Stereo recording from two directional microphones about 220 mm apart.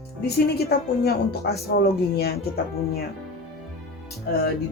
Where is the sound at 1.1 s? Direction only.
45° left (ahead or behind).